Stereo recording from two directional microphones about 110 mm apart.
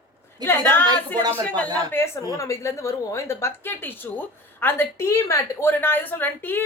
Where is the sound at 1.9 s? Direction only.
25° left (ahead or behind).